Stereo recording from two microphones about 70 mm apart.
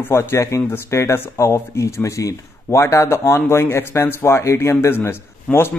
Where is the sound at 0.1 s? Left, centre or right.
Left.